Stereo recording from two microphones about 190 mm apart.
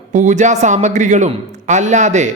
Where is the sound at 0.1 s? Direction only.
40° right (ahead or behind).